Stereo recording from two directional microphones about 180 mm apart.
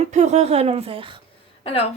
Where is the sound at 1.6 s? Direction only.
35° left (ahead or behind).